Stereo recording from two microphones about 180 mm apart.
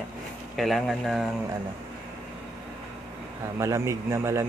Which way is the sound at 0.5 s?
Centre (ahead or behind).